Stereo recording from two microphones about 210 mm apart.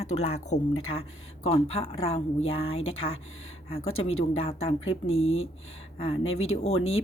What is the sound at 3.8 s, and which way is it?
Speech, 80° left.